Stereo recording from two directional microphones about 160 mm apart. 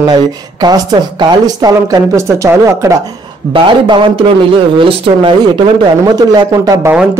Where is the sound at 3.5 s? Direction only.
30° right (ahead or behind).